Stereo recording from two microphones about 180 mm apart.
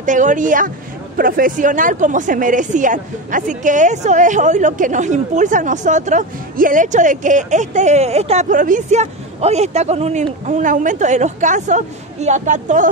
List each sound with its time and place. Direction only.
0.0 s speech: 45° right (ahead or behind)